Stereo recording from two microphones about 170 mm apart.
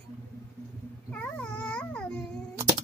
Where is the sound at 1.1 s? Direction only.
5° left (ahead or behind).